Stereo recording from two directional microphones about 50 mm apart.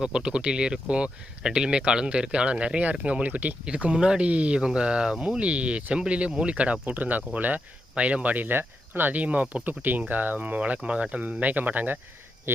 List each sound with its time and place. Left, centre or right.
0.0 s speech: centre; by 11.9 s right
12.5 s speech: right